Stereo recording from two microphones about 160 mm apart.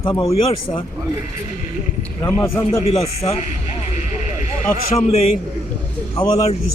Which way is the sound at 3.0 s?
40° left (ahead or behind).